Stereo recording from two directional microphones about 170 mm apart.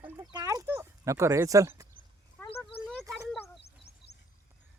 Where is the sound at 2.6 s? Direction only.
Centre (ahead or behind).